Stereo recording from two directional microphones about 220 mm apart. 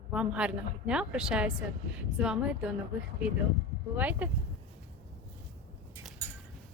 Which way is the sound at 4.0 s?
5° right (ahead or behind).